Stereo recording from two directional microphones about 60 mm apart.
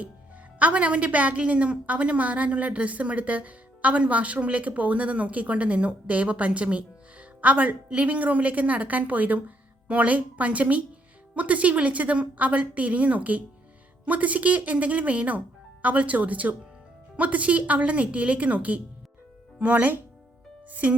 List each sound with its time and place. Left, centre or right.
0.6 s a woman's voice: right